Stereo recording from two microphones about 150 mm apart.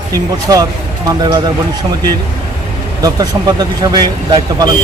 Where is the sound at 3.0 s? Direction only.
25° right (ahead or behind).